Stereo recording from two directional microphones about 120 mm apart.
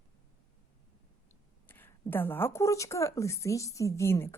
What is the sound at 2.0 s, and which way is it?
A woman's voice, 15° left (ahead or behind).